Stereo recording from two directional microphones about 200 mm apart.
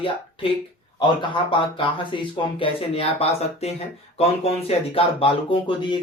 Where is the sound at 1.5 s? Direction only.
25° left (ahead or behind).